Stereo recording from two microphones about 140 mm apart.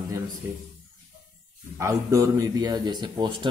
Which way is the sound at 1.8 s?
20° right (ahead or behind).